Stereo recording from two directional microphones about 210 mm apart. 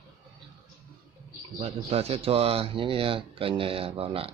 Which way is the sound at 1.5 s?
30° right (ahead or behind).